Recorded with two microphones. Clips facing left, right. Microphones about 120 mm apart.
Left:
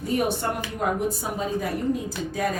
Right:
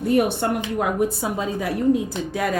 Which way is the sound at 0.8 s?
80° right.